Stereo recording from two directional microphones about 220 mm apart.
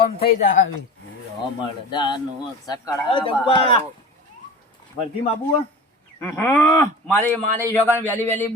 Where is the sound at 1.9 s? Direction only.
20° left (ahead or behind).